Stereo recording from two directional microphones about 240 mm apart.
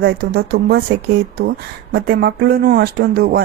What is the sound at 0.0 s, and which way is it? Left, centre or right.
Speech, right.